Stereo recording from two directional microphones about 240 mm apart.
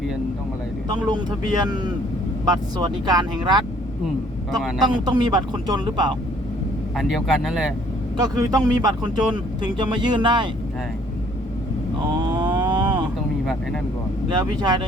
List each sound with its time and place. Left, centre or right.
0.9 s speech: centre
4.9 s speech: centre
6.9 s speech: centre
8.2 s speech: centre
12.0 s a sound: centre
14.3 s speech: centre